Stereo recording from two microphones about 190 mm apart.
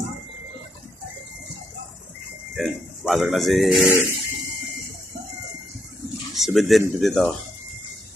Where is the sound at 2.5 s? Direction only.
Centre (ahead or behind).